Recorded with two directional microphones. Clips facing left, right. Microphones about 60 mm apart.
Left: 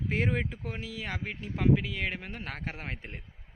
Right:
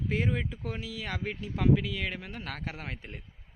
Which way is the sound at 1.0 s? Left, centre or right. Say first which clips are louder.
Right 2 dB; left.